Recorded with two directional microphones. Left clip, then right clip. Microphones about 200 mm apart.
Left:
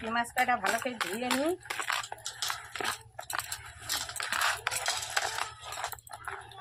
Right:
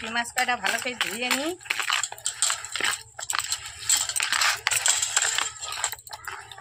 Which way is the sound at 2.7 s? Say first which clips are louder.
Right 7 dB; centre (ahead or behind).